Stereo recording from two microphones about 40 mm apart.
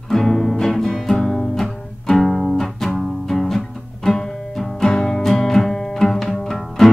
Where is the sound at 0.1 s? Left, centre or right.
Centre.